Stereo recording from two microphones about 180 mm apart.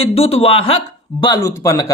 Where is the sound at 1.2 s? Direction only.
20° left (ahead or behind).